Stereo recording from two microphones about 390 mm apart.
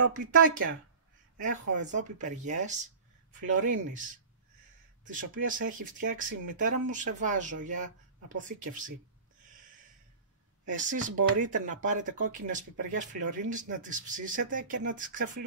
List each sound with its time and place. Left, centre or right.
0.1 s speech: right
10.7 s speech: centre